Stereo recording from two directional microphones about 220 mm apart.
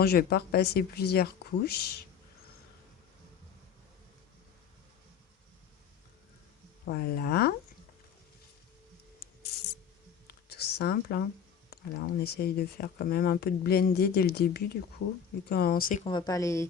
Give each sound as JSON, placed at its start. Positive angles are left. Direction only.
{"t": 0.0, "sound": "speech", "side_deg": 45}
{"t": 6.8, "sound": "speech", "side_deg": 45}
{"t": 10.5, "sound": "speech", "side_deg": 45}
{"t": 16.0, "sound": "speech", "side_deg": 20}